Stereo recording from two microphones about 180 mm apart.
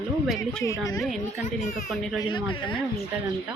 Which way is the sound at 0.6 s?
15° left (ahead or behind).